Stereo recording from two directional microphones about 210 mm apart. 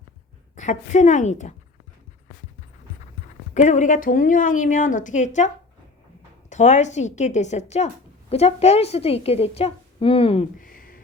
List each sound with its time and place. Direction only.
0.5 s a woman's voice: 35° left (ahead or behind)
3.5 s a woman's voice: 35° left (ahead or behind)
6.5 s a woman's voice: 35° left (ahead or behind)
10.6 s a sound: 40° left (ahead or behind)